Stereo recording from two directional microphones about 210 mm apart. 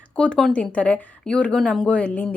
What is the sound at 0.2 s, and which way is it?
Speech, 5° left (ahead or behind).